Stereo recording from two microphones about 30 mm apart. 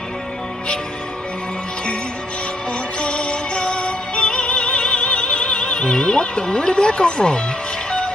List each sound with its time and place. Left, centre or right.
3.0 s music: left